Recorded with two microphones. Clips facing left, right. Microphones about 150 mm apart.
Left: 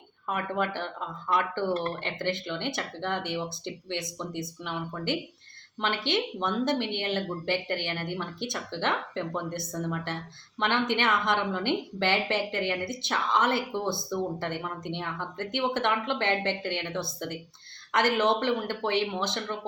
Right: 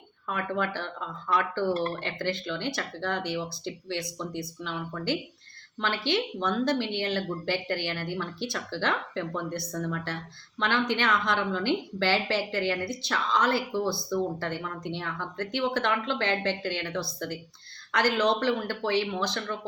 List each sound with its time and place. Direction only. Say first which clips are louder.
0.3 s a woman's voice: even; 20° left (ahead or behind)